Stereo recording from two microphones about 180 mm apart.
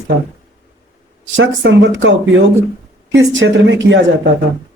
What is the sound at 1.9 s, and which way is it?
Speech, 90° right.